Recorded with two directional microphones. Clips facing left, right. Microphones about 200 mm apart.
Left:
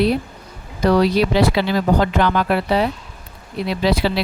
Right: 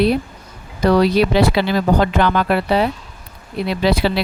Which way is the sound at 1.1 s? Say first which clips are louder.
Right 2 dB; 60° right (ahead or behind).